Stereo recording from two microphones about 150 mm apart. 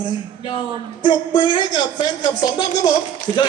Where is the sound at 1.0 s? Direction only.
30° left (ahead or behind).